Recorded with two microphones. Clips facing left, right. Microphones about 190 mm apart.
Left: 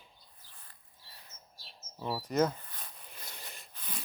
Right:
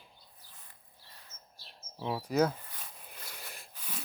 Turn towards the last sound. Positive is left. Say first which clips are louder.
# right 1 dB
turn(degrees=-5)  # may be behind; listen again after turning